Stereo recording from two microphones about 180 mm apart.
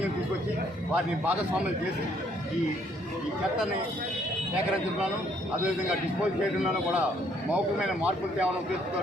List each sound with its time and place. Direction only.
0.9 s speech: 10° right (ahead or behind)
6.6 s a man's voice: 5° right (ahead or behind)